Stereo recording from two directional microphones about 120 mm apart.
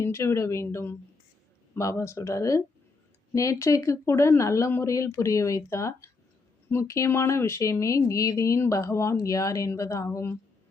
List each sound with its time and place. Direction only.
0.0 s speech: 20° left (ahead or behind)